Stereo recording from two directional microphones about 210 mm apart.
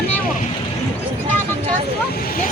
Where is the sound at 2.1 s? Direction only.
45° left (ahead or behind).